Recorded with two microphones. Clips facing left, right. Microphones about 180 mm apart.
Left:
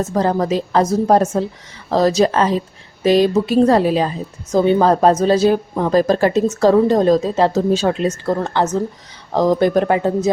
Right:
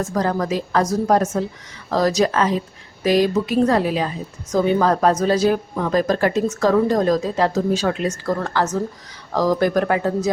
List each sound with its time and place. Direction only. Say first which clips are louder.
0.0 s speech: left 4 dB; 25° left (ahead or behind)